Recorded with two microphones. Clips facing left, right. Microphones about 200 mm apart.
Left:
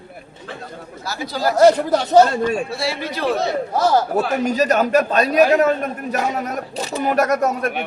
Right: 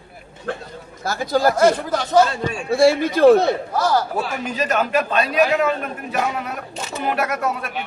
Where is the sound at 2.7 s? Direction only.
50° right (ahead or behind).